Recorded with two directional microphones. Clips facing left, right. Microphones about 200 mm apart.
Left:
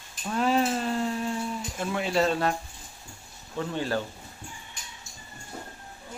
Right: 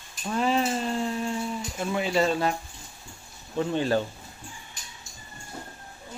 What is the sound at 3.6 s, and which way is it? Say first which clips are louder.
Speech: right 4 dB; 20° right (ahead or behind).